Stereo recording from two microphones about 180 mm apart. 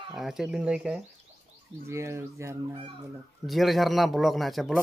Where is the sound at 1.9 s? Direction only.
15° right (ahead or behind).